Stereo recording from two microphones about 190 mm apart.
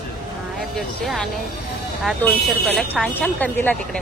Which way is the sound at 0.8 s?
Centre (ahead or behind).